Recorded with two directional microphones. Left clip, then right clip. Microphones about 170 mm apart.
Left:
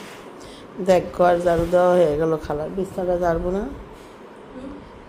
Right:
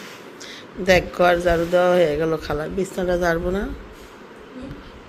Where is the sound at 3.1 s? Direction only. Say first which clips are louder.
Even; 5° right (ahead or behind).